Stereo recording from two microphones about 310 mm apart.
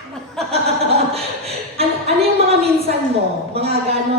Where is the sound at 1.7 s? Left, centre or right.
Centre.